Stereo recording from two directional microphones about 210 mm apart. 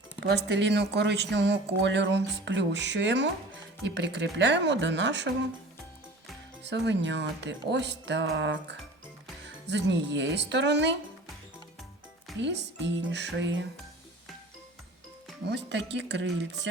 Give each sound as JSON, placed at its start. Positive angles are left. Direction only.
{"t": 0.3, "sound": "speech", "side_deg": -55}
{"t": 6.7, "sound": "speech", "side_deg": -55}
{"t": 12.4, "sound": "speech", "side_deg": -60}
{"t": 15.4, "sound": "speech", "side_deg": -55}